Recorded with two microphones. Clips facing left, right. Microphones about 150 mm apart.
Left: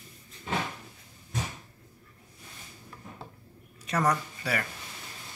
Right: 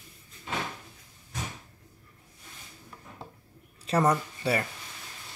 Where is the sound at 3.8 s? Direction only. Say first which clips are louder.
Right 3 dB; 30° right (ahead or behind).